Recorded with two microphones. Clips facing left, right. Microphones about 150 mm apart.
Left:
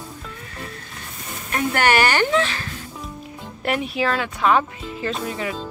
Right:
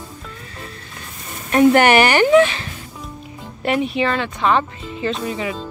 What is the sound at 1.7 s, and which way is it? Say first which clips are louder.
Speech: right 3 dB; 15° right (ahead or behind).